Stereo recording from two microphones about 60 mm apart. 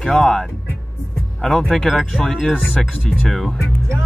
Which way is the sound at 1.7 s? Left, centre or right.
Centre.